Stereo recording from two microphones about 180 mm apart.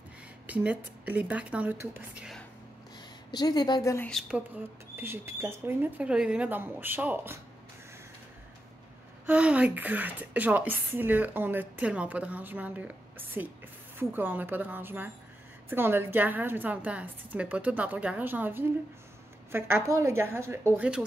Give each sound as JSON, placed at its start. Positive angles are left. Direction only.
{"t": 0.5, "sound": "a woman's voice", "side_deg": -10}
{"t": 3.3, "sound": "a woman's voice", "side_deg": 20}
{"t": 4.1, "sound": "a woman's voice", "side_deg": 0}
{"t": 4.9, "sound": "a woman's voice", "side_deg": -15}
{"t": 9.2, "sound": "a woman's voice", "side_deg": -5}